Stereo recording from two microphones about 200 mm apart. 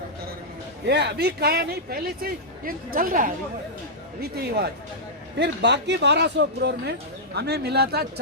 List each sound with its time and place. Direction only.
0.9 s a man's voice: 55° right (ahead or behind)